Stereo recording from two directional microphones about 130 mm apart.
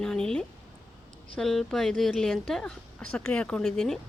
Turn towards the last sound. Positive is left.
turn(degrees=5)  # may be behind; listen again after turning